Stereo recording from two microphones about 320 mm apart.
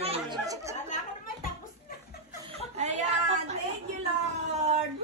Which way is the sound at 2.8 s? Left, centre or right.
Right.